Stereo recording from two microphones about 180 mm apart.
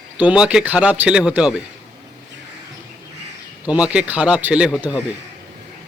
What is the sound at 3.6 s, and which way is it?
A man's voice, 5° right (ahead or behind).